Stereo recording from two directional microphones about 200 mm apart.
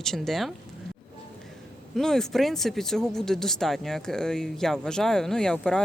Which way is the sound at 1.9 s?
Centre (ahead or behind).